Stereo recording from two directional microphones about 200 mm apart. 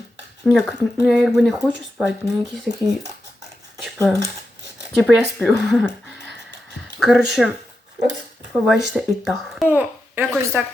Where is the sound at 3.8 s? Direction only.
Centre (ahead or behind).